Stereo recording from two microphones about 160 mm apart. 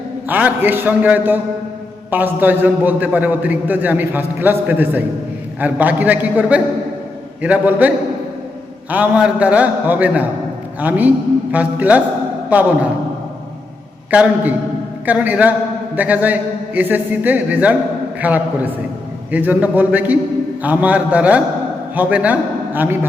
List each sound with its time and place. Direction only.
0.3 s a man's voice: 10° right (ahead or behind)
14.1 s a man's voice: 10° right (ahead or behind)